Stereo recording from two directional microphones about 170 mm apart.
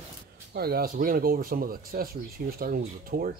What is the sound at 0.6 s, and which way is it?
Speech, 65° right (ahead or behind).